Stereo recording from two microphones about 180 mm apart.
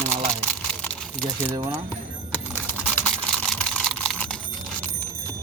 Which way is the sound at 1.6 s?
15° right (ahead or behind).